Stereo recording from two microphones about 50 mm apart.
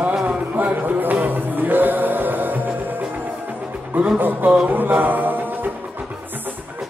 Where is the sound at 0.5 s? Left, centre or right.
Right.